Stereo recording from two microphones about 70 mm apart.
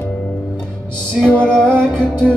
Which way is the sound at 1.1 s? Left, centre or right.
Centre.